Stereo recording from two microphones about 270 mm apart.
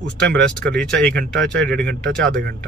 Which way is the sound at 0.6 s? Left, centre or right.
Centre.